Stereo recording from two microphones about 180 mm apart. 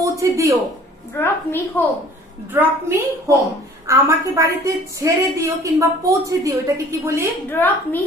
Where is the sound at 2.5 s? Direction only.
10° right (ahead or behind).